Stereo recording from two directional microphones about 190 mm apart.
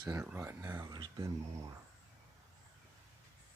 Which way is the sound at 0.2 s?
10° right (ahead or behind).